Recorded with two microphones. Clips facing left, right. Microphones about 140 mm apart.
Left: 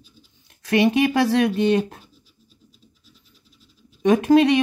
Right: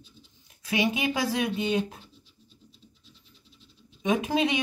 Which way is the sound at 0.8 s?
70° left (ahead or behind).